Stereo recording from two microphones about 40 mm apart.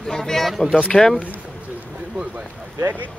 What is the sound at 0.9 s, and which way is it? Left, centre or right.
Speech, centre.